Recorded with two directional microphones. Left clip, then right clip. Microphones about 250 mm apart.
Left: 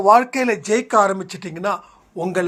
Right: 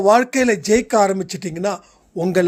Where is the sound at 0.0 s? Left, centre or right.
Right.